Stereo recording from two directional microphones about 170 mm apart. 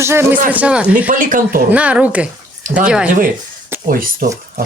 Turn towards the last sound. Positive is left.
turn(degrees=-50)  # may be behind; listen again after turning